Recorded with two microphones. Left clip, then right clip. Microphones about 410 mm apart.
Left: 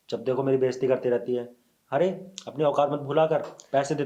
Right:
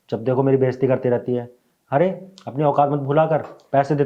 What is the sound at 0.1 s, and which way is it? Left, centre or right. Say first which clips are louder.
Speech: right 6 dB; right.